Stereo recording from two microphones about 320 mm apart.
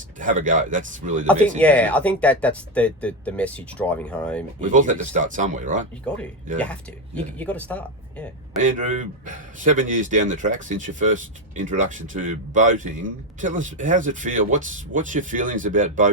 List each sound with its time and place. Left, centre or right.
0.2 s a man's voice: right
1.3 s speech: centre
4.6 s a man's voice: right
7.3 s speech: centre
8.5 s a man's voice: right